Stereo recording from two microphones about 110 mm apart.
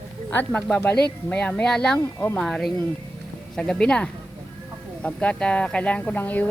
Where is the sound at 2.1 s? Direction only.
20° left (ahead or behind).